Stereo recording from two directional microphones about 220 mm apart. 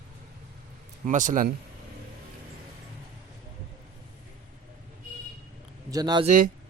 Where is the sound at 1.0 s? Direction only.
35° right (ahead or behind).